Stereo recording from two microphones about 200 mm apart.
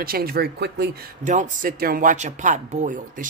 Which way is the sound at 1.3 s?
40° right (ahead or behind).